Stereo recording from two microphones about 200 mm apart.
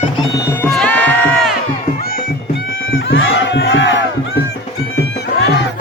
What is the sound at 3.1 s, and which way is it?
Crowd, 70° left (ahead or behind).